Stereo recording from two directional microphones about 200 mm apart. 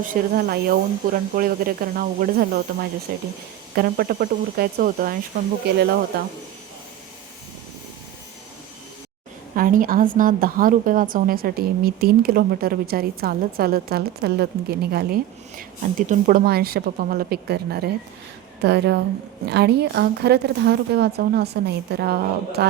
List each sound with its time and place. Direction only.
0.1 s a woman's voice: 50° right (ahead or behind)
9.6 s a woman's voice: 45° right (ahead or behind)